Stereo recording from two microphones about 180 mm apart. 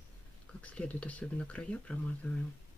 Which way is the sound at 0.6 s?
5° left (ahead or behind).